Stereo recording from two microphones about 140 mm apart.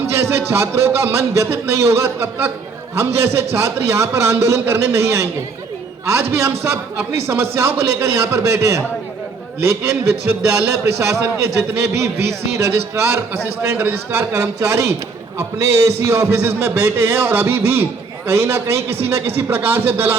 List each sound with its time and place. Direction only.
0.3 s a man's voice: 20° right (ahead or behind)
6.6 s a man's voice: 20° right (ahead or behind)